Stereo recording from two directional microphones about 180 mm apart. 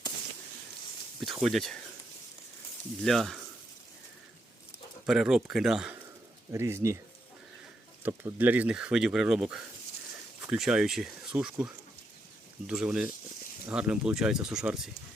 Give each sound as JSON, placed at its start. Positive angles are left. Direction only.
{"t": 1.2, "sound": "speech", "side_deg": 0}
{"t": 3.0, "sound": "speech", "side_deg": 0}
{"t": 5.0, "sound": "speech", "side_deg": -5}
{"t": 6.5, "sound": "speech", "side_deg": -15}
{"t": 8.0, "sound": "speech", "side_deg": -10}